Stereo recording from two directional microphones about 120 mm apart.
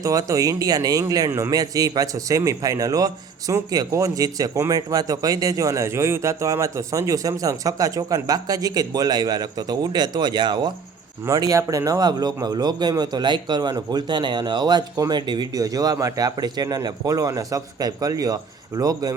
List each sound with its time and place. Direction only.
0.0 s a man's voice: 30° right (ahead or behind)